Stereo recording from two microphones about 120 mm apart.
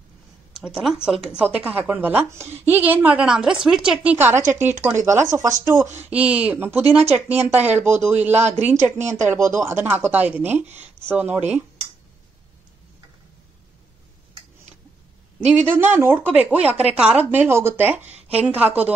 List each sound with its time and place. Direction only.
0.5 s speech: 5° right (ahead or behind)
1.4 s a woman's voice: 15° right (ahead or behind)
6.0 s a woman's voice: 10° right (ahead or behind)
15.5 s a woman's voice: 15° right (ahead or behind)